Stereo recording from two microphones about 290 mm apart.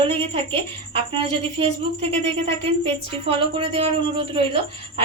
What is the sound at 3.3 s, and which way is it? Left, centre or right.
A woman's voice, centre.